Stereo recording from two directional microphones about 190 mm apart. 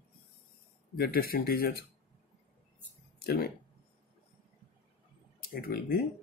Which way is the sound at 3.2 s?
55° left (ahead or behind).